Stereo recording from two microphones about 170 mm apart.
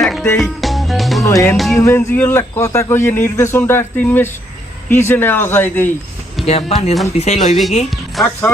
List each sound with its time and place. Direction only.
0.0 s music: centre (ahead or behind)
1.2 s music: 20° left (ahead or behind)
1.5 s music: centre (ahead or behind)
1.8 s a man's voice: 15° left (ahead or behind)
6.4 s speech: 35° left (ahead or behind)
7.9 s music: centre (ahead or behind)